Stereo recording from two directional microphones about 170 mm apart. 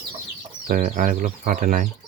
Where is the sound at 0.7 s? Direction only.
50° right (ahead or behind).